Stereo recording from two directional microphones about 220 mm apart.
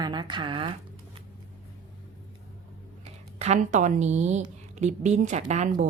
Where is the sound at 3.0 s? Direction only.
30° right (ahead or behind).